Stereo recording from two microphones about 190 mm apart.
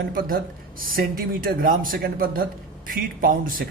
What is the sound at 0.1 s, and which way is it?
A man's voice, 50° right (ahead or behind).